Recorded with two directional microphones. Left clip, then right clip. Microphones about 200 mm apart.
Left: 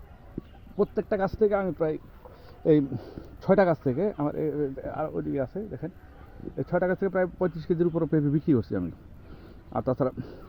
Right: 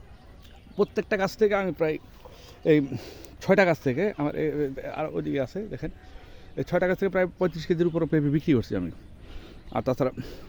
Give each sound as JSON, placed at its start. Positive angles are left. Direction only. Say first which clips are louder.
{"t": 0.8, "sound": "speech", "louder": "right 1 dB", "side_deg": -15}
{"t": 9.7, "sound": "speech", "louder": "right 1 dB", "side_deg": -15}